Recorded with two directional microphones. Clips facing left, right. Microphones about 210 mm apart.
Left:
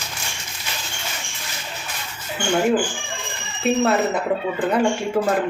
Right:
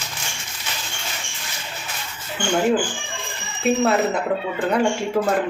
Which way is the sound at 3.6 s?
Centre (ahead or behind).